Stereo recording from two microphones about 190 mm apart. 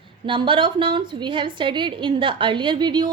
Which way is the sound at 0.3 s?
25° right (ahead or behind).